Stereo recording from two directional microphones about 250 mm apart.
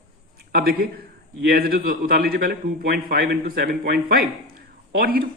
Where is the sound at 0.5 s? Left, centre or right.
Right.